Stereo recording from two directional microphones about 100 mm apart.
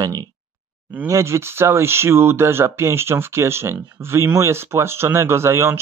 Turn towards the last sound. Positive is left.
turn(degrees=-25)  # may be behind; listen again after turning